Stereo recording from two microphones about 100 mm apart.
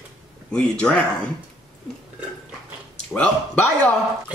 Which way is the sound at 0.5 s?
10° left (ahead or behind).